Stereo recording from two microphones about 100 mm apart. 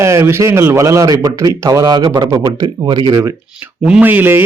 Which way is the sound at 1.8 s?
45° right (ahead or behind).